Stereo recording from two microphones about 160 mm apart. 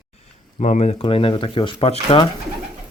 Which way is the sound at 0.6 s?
45° left (ahead or behind).